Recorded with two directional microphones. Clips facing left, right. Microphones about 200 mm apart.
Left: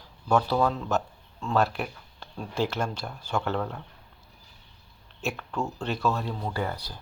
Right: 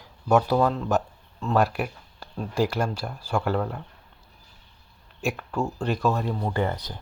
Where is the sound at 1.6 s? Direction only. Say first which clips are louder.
Right 2 dB; 15° right (ahead or behind).